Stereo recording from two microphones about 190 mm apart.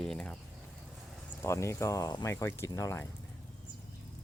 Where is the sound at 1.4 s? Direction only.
15° left (ahead or behind).